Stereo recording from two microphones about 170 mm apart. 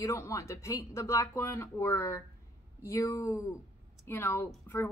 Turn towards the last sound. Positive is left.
turn(degrees=15)  # may be behind; listen again after turning